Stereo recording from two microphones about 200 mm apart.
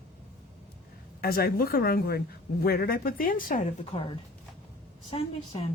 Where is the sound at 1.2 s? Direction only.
50° left (ahead or behind).